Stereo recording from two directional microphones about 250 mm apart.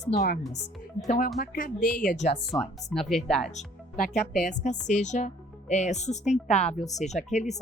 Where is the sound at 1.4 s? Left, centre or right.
Left.